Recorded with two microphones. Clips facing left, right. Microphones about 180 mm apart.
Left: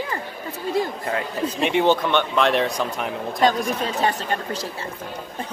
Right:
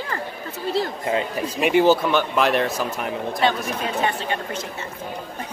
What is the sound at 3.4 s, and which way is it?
Speech, 40° left (ahead or behind).